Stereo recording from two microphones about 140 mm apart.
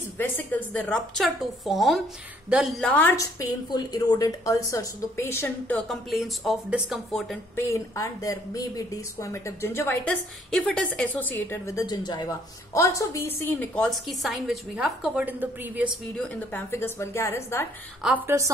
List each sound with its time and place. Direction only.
0.2 s a woman's voice: 10° left (ahead or behind)
2.9 s a woman's voice: 15° left (ahead or behind)
3.3 s a woman's voice: 25° left (ahead or behind)
5.9 s a woman's voice: centre (ahead or behind)
7.5 s a woman's voice: 20° left (ahead or behind)
13.8 s a woman's voice: centre (ahead or behind)
16.2 s a woman's voice: 15° left (ahead or behind)
18.0 s a woman's voice: 15° right (ahead or behind)